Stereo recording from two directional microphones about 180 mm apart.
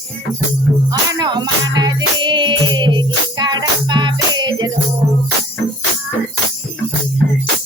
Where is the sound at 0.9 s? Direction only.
25° right (ahead or behind).